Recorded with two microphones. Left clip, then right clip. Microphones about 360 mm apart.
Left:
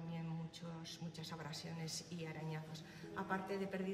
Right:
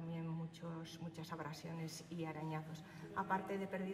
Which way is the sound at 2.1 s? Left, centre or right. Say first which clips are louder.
Right 3 dB; centre.